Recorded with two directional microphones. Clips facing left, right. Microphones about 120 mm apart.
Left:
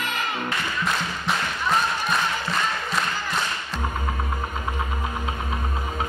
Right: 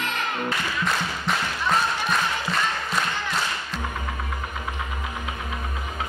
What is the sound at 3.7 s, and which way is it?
Music, 35° left (ahead or behind).